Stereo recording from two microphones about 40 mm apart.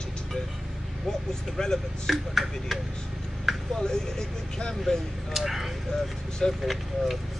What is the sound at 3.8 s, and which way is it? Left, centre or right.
Speech, centre.